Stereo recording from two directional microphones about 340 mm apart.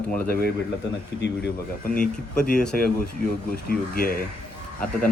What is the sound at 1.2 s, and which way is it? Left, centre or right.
Speech, left.